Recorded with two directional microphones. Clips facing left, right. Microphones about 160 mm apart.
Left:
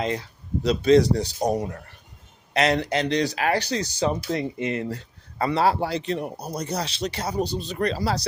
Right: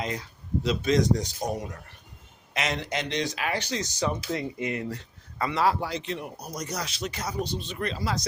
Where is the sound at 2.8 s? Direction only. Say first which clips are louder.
Left 6 dB; 35° left (ahead or behind).